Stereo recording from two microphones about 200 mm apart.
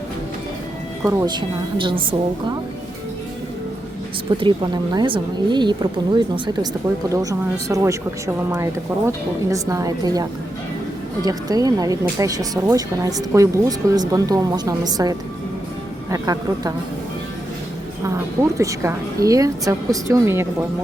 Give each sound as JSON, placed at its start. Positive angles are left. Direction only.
{"t": 1.0, "sound": "speech", "side_deg": -15}
{"t": 4.4, "sound": "speech", "side_deg": -25}
{"t": 18.5, "sound": "speech", "side_deg": -15}